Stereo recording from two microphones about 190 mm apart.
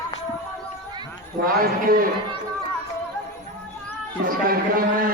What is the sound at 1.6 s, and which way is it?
Speech, 50° right (ahead or behind).